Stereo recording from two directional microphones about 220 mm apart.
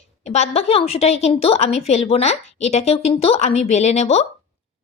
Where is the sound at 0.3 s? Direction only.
30° left (ahead or behind).